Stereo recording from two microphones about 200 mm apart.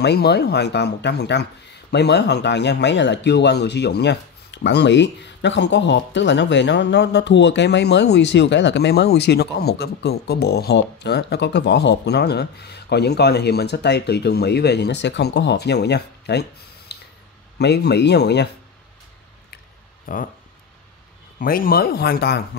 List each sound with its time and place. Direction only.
0.0 s speech: 55° left (ahead or behind)
20.1 s speech: 45° left (ahead or behind)
21.4 s speech: 45° left (ahead or behind)